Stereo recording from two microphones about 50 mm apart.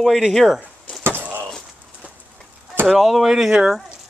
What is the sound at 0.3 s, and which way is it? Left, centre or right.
Speech, centre.